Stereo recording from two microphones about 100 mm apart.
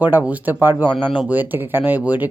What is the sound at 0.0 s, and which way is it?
Speech, 20° right (ahead or behind).